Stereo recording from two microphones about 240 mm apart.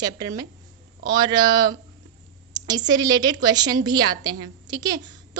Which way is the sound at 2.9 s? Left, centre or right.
Centre.